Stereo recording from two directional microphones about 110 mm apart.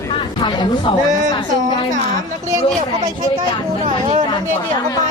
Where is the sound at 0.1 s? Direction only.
50° left (ahead or behind).